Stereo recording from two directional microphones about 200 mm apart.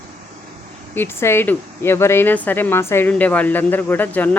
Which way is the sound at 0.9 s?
10° left (ahead or behind).